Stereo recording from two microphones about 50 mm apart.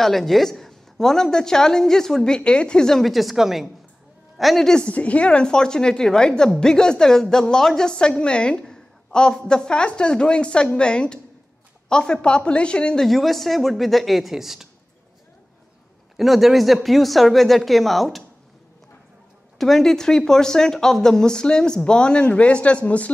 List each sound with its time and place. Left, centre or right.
0.0 s a woman's voice: centre
3.0 s speech: centre
4.8 s a woman's voice: left
13.0 s speech: centre
16.2 s speech: centre
19.6 s a woman's voice: centre; by 23.1 s left